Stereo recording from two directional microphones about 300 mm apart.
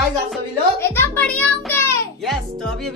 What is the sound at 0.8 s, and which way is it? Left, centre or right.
A child's voice, centre.